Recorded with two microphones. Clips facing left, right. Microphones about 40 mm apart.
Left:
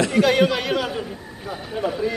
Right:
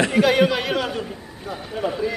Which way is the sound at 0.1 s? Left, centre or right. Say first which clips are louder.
Even; centre.